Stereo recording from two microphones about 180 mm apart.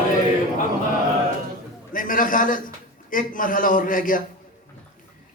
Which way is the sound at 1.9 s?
50° left (ahead or behind).